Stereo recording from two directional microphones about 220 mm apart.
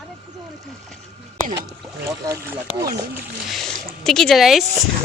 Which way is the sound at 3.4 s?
Centre (ahead or behind).